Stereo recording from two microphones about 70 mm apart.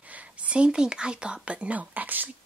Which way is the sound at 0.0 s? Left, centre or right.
Centre.